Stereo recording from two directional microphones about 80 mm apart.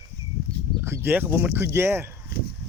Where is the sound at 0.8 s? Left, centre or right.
Right.